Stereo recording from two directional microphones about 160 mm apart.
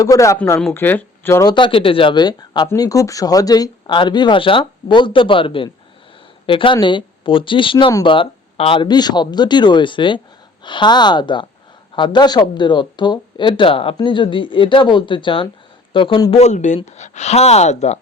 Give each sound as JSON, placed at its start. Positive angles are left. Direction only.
{"t": 0.0, "sound": "speech", "side_deg": 20}
{"t": 1.5, "sound": "speech", "side_deg": 30}
{"t": 16.4, "sound": "speech", "side_deg": 45}